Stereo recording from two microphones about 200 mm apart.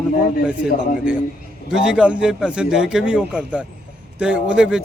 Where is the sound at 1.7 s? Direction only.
5° right (ahead or behind).